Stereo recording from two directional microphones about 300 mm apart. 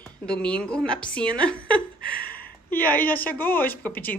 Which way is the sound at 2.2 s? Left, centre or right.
Left.